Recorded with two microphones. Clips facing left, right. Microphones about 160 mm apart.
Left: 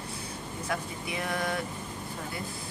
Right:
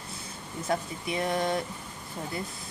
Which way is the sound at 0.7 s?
30° right (ahead or behind).